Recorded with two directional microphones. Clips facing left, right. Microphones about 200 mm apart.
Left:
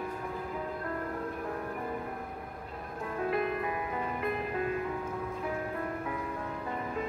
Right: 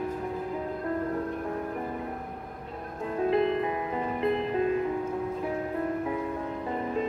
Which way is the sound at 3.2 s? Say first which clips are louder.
Right 6 dB; 25° right (ahead or behind).